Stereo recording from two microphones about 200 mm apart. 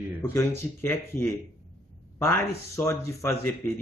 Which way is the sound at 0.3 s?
10° left (ahead or behind).